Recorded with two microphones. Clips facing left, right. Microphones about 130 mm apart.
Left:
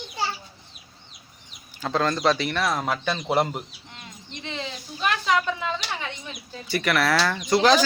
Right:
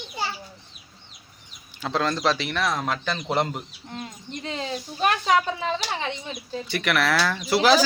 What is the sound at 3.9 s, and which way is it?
Speech, 40° right (ahead or behind).